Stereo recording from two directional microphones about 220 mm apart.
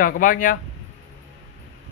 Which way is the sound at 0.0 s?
40° left (ahead or behind).